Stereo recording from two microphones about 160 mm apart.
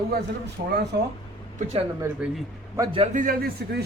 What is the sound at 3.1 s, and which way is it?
Speech, 60° right (ahead or behind).